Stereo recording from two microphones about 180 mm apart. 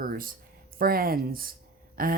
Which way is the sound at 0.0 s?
50° right (ahead or behind).